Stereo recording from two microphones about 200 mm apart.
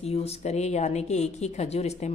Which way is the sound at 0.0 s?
30° left (ahead or behind).